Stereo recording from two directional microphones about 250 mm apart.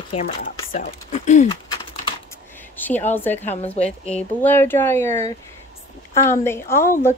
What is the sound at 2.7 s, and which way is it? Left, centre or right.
Speech, centre.